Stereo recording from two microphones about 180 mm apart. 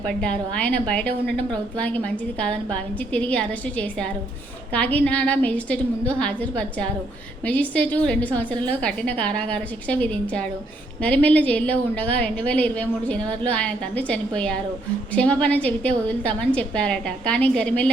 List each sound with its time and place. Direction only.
0.1 s a woman's voice: 5° left (ahead or behind)